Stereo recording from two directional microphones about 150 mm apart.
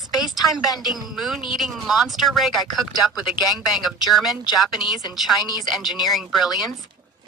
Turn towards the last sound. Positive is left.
turn(degrees=0)  # may be behind; listen again after turning